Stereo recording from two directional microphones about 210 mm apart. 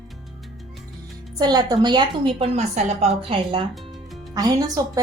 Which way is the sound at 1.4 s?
20° right (ahead or behind).